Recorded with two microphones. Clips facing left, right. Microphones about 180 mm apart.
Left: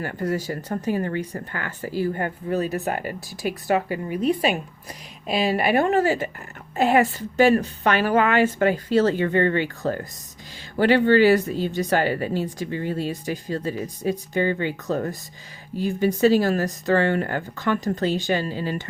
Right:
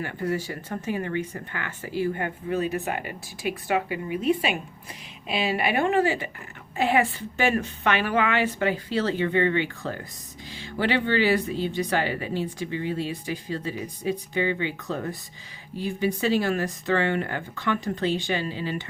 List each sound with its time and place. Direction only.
0.0 s speech: 40° left (ahead or behind)